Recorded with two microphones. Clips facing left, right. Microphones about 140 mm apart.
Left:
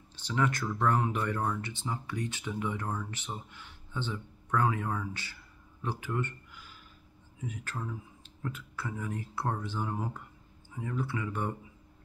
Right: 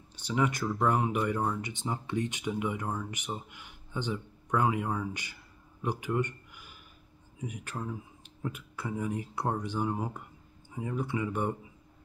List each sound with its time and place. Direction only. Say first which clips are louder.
0.1 s speech: right 1 dB; 15° right (ahead or behind)